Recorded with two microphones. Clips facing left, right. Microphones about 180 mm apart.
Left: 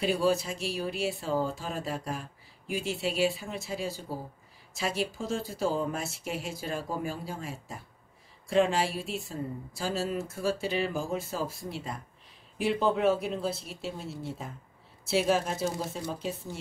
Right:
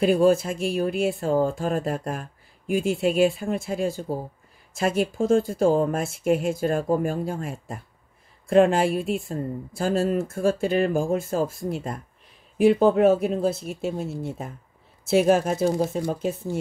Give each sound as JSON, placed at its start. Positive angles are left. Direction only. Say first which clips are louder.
{"t": 0.0, "sound": "speech", "louder": "right 8 dB", "side_deg": -50}